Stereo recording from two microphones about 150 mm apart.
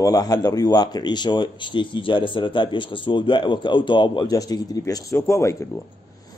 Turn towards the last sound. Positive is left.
turn(degrees=20)  # may be behind; listen again after turning